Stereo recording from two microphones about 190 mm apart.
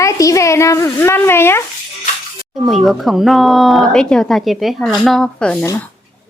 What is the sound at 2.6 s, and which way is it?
Speech, centre (ahead or behind).